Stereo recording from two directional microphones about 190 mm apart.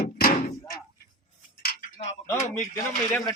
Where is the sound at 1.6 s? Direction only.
45° left (ahead or behind).